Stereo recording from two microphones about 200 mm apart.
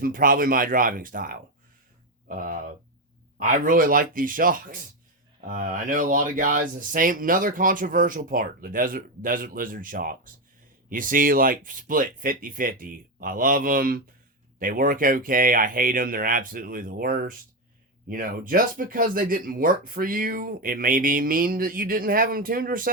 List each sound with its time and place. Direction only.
0.0 s speech: 45° right (ahead or behind)